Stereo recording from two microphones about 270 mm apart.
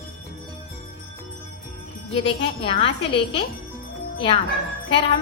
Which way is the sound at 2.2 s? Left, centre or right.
Left.